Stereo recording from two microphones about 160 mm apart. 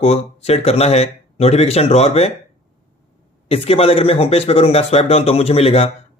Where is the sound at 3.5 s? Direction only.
40° left (ahead or behind).